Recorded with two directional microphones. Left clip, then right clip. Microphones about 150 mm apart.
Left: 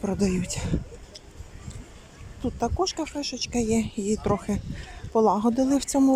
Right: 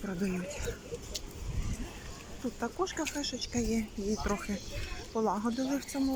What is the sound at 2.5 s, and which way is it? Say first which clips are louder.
Speech: left 8 dB; 20° left (ahead or behind).